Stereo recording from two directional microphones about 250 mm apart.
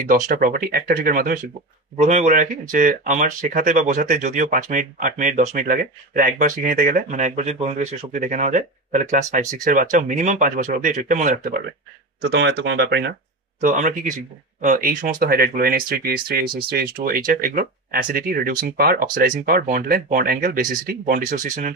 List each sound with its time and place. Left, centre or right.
0.0 s speech: right
12.2 s speech: right
13.6 s speech: right